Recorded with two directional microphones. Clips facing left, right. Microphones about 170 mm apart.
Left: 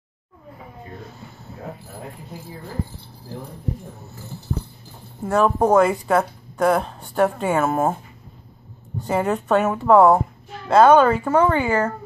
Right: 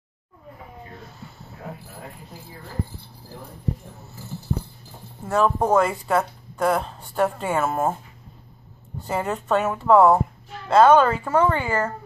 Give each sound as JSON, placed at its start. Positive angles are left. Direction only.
{"t": 5.2, "sound": "a woman's voice", "side_deg": 5}
{"t": 6.0, "sound": "a woman's voice", "side_deg": 0}
{"t": 9.0, "sound": "a woman's voice", "side_deg": 0}